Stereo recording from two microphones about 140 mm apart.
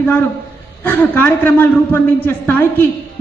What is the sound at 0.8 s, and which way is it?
A man's voice, 15° left (ahead or behind).